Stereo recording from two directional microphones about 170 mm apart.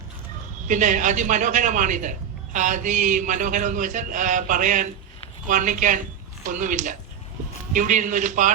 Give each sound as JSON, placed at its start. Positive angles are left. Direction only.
{"t": 0.7, "sound": "a man's voice", "side_deg": -50}